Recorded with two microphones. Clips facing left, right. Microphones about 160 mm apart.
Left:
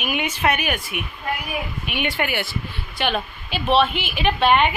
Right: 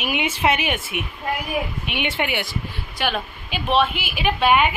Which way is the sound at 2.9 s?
5° right (ahead or behind).